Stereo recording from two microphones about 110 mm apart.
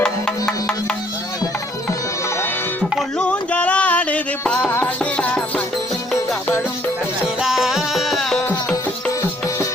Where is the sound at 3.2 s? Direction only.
10° left (ahead or behind).